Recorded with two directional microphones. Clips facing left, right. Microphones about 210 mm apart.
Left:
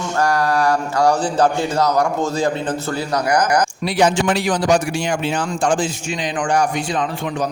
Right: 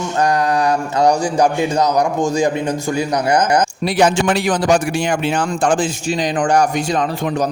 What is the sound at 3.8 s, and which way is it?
A man's voice, 55° right (ahead or behind).